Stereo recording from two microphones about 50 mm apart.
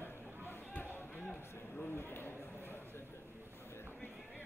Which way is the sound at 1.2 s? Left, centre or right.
Left.